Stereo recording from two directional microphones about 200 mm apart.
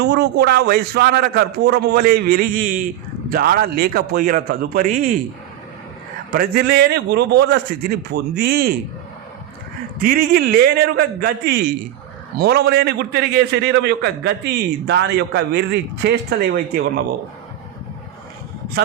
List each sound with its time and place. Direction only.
0.0 s a man's voice: 55° right (ahead or behind)
6.3 s a man's voice: 50° right (ahead or behind)
10.0 s a man's voice: 50° right (ahead or behind)